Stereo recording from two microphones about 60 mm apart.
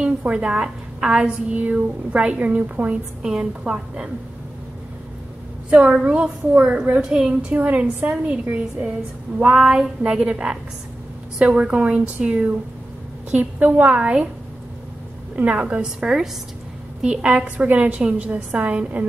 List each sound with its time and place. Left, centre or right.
0.0 s a woman's voice: right
3.2 s a woman's voice: centre
5.7 s a woman's voice: right
7.5 s a woman's voice: right
15.3 s a woman's voice: right
15.8 s a woman's voice: centre; by 19.0 s right